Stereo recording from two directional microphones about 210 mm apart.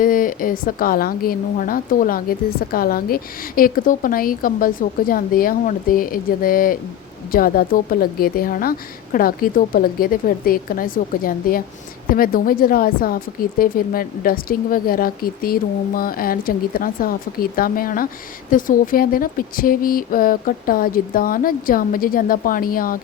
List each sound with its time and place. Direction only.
0.0 s a woman's voice: 40° left (ahead or behind)